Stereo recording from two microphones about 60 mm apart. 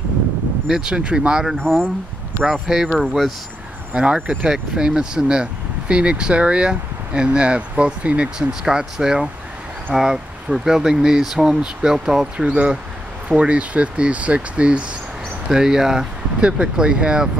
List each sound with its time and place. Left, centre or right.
0.7 s speech: centre
1.6 s speech: centre
2.4 s speech: centre
3.9 s speech: centre
8.4 s speech: centre
16.3 s speech: centre